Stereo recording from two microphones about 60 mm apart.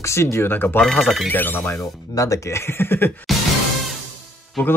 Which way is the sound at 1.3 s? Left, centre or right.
Left.